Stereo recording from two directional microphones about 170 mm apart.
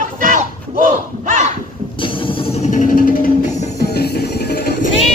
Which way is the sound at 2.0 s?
30° left (ahead or behind).